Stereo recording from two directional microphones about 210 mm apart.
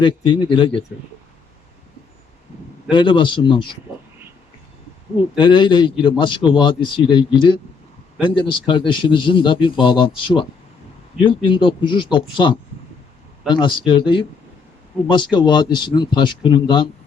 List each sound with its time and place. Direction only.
0.0 s a man's voice: 25° left (ahead or behind)
2.9 s a man's voice: 25° left (ahead or behind)
5.4 s a man's voice: 20° left (ahead or behind)
11.4 s a man's voice: 25° left (ahead or behind)